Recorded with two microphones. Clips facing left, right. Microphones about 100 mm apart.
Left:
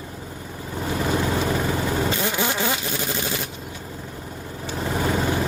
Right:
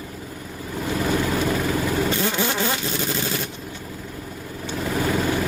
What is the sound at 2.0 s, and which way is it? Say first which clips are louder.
Vehicle: right 1 dB; 20° left (ahead or behind).